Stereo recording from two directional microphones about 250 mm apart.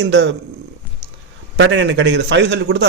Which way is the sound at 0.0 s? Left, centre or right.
Right.